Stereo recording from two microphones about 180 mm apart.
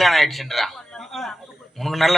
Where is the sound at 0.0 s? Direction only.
Centre (ahead or behind).